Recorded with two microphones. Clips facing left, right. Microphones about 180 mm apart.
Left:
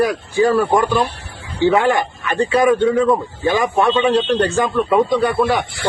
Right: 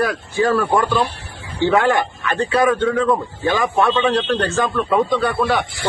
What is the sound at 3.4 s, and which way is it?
Speech, 15° left (ahead or behind).